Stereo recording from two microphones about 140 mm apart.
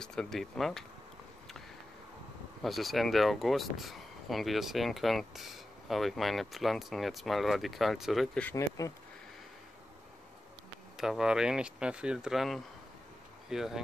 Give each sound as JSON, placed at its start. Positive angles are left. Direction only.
{"t": 0.0, "sound": "speech", "side_deg": 5}
{"t": 2.6, "sound": "speech", "side_deg": 0}
{"t": 8.5, "sound": "speech", "side_deg": 25}
{"t": 11.0, "sound": "speech", "side_deg": -5}